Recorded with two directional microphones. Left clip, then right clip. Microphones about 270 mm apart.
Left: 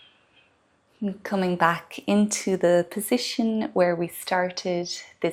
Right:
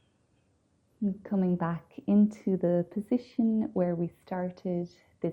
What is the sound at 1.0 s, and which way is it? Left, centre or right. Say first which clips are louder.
Speech: left 6 dB; centre.